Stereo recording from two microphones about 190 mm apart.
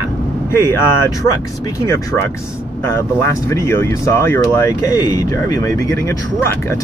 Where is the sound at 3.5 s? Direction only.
15° left (ahead or behind).